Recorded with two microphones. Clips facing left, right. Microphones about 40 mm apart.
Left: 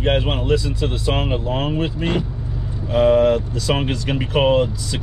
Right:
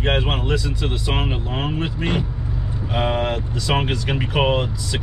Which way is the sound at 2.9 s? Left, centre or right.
Right.